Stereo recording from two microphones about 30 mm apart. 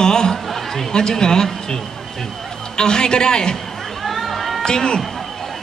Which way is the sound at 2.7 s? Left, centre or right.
Left.